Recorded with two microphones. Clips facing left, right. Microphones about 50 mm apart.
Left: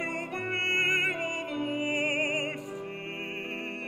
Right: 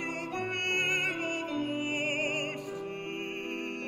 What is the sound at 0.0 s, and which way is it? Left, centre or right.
Music, centre.